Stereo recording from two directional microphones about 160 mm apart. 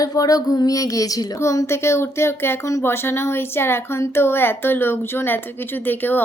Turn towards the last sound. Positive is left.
turn(degrees=10)  # may be behind; listen again after turning